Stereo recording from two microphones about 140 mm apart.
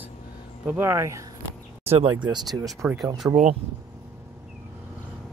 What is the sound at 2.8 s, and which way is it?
Speech, 10° right (ahead or behind).